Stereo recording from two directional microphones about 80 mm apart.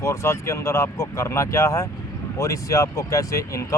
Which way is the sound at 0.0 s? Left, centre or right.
Left.